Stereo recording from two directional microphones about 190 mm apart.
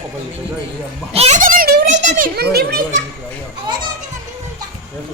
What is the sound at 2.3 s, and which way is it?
Speech, 55° right (ahead or behind).